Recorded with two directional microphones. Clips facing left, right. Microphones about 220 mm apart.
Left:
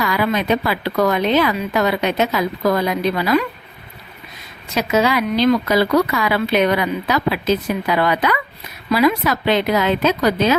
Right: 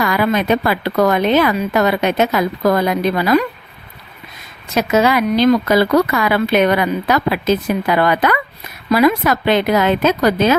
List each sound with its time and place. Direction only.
0.0 s speech: 50° right (ahead or behind)
4.7 s speech: 45° right (ahead or behind)